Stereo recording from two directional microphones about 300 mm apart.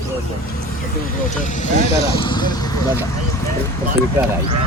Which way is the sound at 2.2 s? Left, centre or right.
Centre.